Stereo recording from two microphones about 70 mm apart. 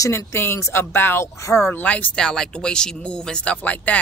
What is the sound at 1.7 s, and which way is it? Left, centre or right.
Speech, left.